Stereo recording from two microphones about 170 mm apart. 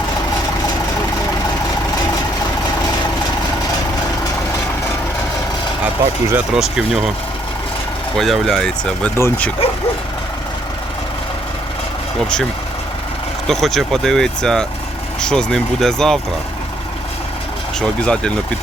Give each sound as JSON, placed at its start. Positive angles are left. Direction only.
{"t": 6.3, "sound": "speech", "side_deg": -5}
{"t": 8.2, "sound": "speech", "side_deg": 0}
{"t": 9.1, "sound": "speech", "side_deg": 15}
{"t": 13.5, "sound": "speech", "side_deg": 0}
{"t": 17.7, "sound": "speech", "side_deg": 5}